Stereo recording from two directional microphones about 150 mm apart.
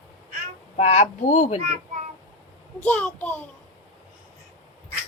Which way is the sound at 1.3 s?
55° left (ahead or behind).